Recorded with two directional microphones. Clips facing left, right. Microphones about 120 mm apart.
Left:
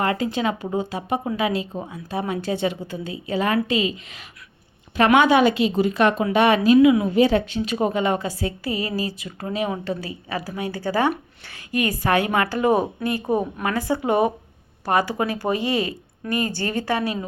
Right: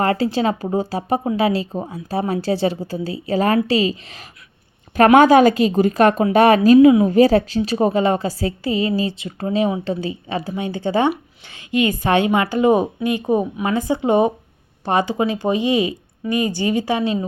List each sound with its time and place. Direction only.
0.0 s a woman's voice: 35° right (ahead or behind)